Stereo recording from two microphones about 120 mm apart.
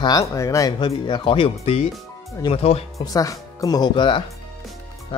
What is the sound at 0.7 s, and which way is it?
Speech, 40° left (ahead or behind).